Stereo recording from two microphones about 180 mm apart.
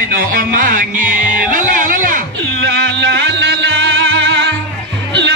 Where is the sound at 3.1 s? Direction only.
80° right.